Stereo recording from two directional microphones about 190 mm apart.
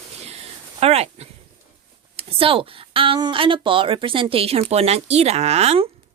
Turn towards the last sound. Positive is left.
turn(degrees=-30)  # may be behind; listen again after turning